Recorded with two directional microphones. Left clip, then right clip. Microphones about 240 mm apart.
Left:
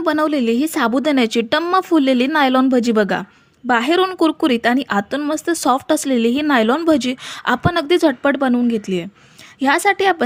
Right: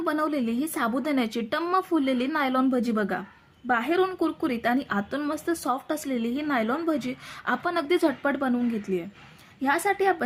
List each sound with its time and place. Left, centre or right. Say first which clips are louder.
0.0 s a woman's voice: left 9 dB; left